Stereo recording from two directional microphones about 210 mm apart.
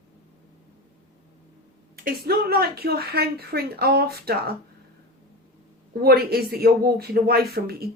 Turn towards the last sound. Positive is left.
turn(degrees=-45)  # may be behind; listen again after turning